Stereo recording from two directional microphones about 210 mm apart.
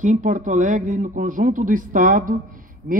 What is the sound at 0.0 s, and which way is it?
A man's voice, 35° right (ahead or behind).